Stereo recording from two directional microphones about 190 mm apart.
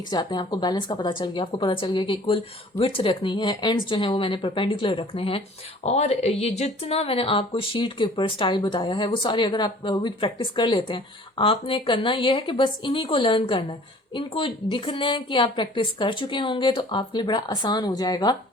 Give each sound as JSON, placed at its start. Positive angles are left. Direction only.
{"t": 0.1, "sound": "speech", "side_deg": 20}